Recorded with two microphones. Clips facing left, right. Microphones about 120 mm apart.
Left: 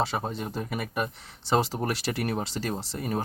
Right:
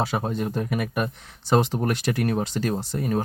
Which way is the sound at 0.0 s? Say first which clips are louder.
Right 4 dB; centre (ahead or behind).